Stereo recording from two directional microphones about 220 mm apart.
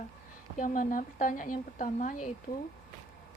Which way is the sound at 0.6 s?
35° left (ahead or behind).